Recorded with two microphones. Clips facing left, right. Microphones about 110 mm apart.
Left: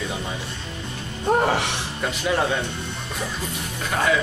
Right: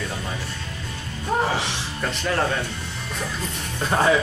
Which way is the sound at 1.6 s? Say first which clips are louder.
Left 2 dB; 60° left (ahead or behind).